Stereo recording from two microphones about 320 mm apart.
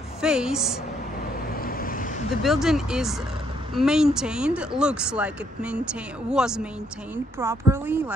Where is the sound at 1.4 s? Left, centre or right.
Left.